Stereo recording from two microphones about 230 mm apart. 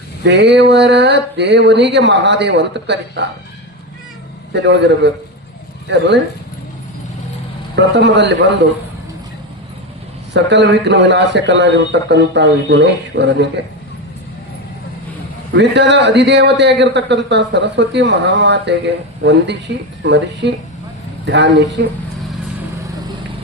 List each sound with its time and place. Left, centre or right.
0.3 s a man's voice: right
4.5 s a man's voice: right
7.8 s a man's voice: right
10.3 s a man's voice: right
15.5 s a man's voice: right